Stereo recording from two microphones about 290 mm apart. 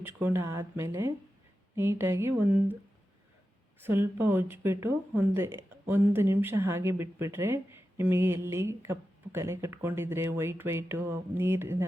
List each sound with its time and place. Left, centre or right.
0.0 s speech: centre
3.8 s speech: centre